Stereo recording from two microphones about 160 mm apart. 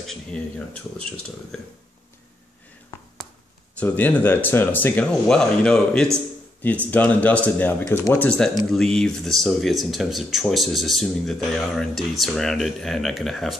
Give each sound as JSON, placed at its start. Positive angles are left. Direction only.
{"t": 0.0, "sound": "speech", "side_deg": 5}
{"t": 3.8, "sound": "speech", "side_deg": 10}